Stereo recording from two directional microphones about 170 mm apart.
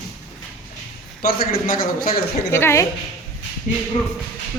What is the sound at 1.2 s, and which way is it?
A man's voice, 60° left (ahead or behind).